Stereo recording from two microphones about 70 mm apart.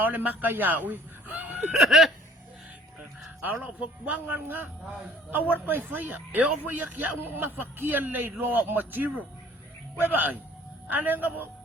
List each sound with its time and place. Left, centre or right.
0.0 s speech: right
1.7 s a sound: centre
3.4 s a man's voice: right